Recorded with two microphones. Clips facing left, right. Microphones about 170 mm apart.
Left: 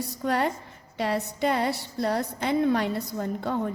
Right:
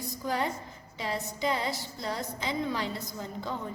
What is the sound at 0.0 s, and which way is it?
A woman's voice, 65° left (ahead or behind).